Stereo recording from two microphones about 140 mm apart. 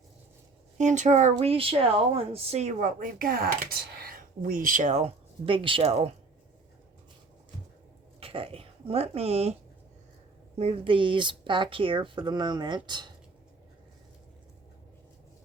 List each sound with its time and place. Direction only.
0.8 s speech: 60° right (ahead or behind)
5.5 s speech: 40° right (ahead or behind)
8.2 s speech: 40° right (ahead or behind)
10.6 s speech: 45° right (ahead or behind)